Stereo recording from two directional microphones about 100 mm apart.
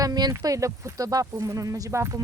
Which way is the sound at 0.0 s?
40° right (ahead or behind).